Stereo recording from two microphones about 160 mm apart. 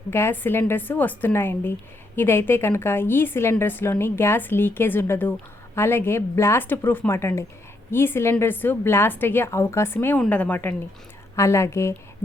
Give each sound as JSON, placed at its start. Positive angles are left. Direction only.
{"t": 0.1, "sound": "a woman's voice", "side_deg": 15}